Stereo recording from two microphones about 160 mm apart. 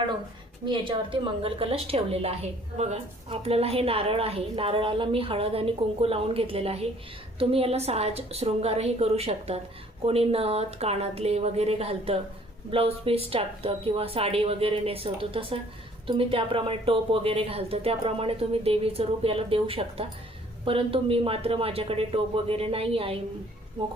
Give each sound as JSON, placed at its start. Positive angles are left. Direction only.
{"t": 0.6, "sound": "speech", "side_deg": -30}